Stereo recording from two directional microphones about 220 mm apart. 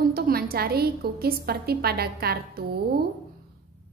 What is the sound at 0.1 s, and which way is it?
A woman's voice, 45° right (ahead or behind).